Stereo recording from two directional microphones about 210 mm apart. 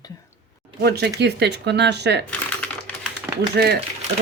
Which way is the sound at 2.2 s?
5° left (ahead or behind).